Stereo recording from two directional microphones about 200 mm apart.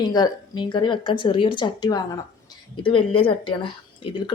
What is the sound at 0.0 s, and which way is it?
Speech, 20° left (ahead or behind).